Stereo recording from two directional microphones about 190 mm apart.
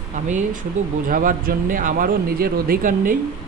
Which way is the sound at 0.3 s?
40° right (ahead or behind).